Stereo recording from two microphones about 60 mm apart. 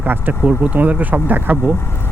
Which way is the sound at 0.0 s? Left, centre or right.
Right.